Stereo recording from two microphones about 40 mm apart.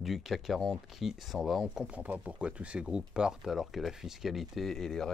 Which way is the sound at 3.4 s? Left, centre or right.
Centre.